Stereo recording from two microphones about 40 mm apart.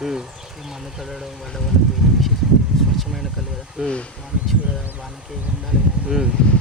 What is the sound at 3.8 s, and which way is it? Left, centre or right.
Speech, right.